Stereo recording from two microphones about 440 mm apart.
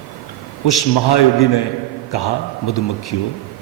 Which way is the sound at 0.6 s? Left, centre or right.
Left.